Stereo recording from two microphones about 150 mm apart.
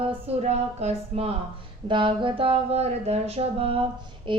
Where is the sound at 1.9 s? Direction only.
35° right (ahead or behind).